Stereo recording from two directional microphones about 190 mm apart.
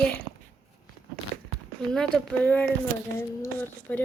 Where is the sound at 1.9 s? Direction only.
5° left (ahead or behind).